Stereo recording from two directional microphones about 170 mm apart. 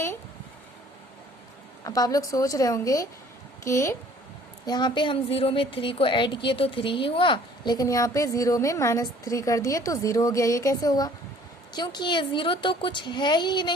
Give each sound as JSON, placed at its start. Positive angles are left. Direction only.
{"t": 1.8, "sound": "a woman's voice", "side_deg": 20}